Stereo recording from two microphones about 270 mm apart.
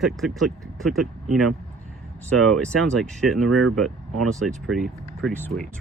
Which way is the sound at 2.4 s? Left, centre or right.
Centre.